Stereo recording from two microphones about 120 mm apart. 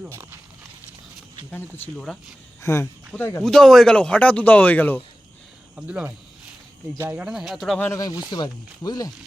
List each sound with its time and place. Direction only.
0.1 s speech: 20° right (ahead or behind)
1.5 s speech: 15° left (ahead or behind)
3.4 s speech: 5° left (ahead or behind)
5.7 s speech: 10° right (ahead or behind)
7.3 s speech: 5° right (ahead or behind)
7.8 s speech: 25° left (ahead or behind)